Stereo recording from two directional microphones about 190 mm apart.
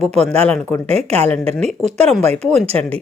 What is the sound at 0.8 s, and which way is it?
A woman's voice, 30° right (ahead or behind).